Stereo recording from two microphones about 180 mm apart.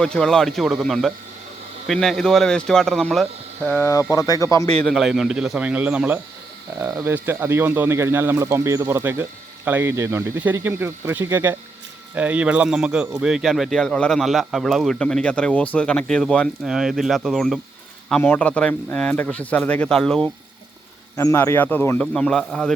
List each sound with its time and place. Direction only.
0.0 s speech: 5° left (ahead or behind)
3.8 s speech: 20° left (ahead or behind)
4.8 s speech: centre (ahead or behind)
21.2 s speech: 15° left (ahead or behind)